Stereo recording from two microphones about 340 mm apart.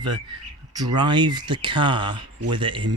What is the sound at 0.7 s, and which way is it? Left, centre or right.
Speech, centre.